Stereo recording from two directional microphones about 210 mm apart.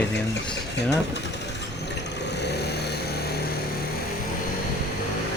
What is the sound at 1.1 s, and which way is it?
Vehicle, 55° left (ahead or behind).